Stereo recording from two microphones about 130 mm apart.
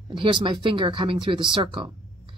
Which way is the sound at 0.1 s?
40° right (ahead or behind).